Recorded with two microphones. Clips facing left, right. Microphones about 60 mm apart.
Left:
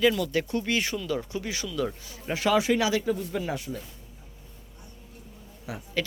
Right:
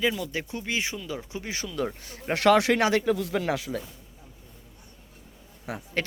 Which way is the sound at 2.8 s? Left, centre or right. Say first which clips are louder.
Right 2 dB; right.